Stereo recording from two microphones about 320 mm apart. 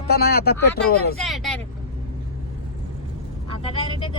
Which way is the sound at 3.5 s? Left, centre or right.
Centre.